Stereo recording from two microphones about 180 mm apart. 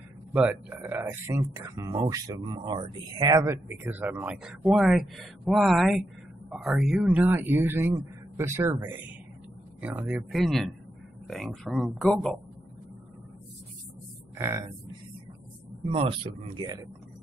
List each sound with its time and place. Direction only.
0.3 s speech: 10° right (ahead or behind)
15.9 s speech: 30° right (ahead or behind)